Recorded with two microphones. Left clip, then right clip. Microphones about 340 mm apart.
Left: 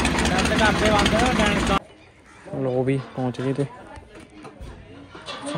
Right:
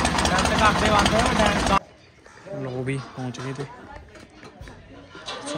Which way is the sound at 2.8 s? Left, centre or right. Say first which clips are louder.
Left 6 dB; centre.